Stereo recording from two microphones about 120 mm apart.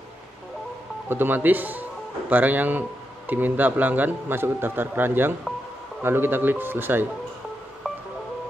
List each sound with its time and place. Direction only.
1.0 s a man's voice: 15° right (ahead or behind)
7.8 s music: 5° right (ahead or behind)